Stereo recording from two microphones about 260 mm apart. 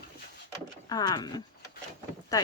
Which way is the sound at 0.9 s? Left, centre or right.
Centre.